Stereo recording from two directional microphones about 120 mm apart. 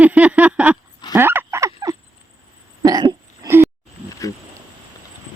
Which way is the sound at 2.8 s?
30° right (ahead or behind).